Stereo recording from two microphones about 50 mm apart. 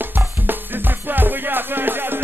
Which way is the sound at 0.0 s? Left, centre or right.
Right.